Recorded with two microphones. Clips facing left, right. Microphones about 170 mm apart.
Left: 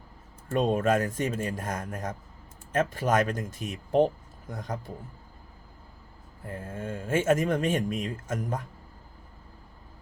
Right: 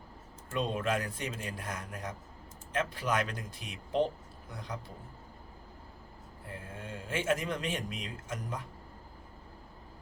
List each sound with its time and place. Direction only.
0.4 s speech: 45° left (ahead or behind)
6.5 s speech: 45° left (ahead or behind)